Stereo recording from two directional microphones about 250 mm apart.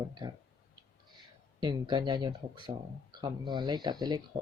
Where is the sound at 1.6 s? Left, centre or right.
Centre.